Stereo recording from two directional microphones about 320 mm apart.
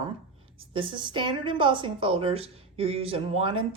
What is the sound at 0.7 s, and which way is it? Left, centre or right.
A woman's voice, centre.